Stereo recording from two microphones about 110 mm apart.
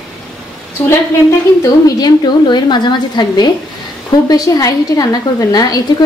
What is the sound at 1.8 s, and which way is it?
A woman's voice, 40° left (ahead or behind).